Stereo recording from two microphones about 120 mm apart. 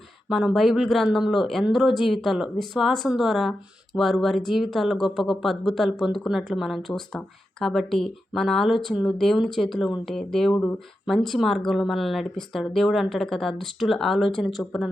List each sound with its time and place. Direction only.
0.3 s speech: centre (ahead or behind)